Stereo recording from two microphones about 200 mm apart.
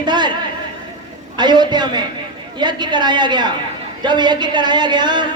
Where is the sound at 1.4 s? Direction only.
20° right (ahead or behind).